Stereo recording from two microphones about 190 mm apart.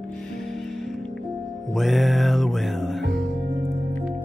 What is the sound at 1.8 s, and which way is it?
Music, centre (ahead or behind).